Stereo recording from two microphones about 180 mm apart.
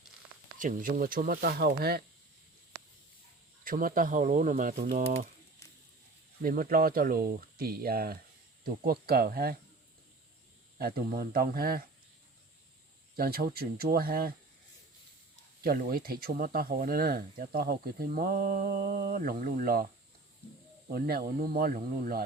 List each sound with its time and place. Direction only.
0.6 s speech: 50° right (ahead or behind)
3.6 s speech: 50° right (ahead or behind)
6.4 s speech: 55° right (ahead or behind)
10.8 s speech: 55° right (ahead or behind)
13.1 s speech: 55° right (ahead or behind)
15.6 s speech: 55° right (ahead or behind)